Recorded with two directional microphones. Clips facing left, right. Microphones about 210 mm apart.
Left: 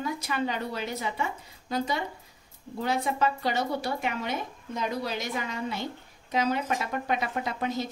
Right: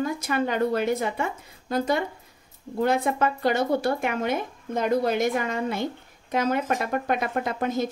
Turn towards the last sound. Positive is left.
turn(degrees=-50)  # may be behind; listen again after turning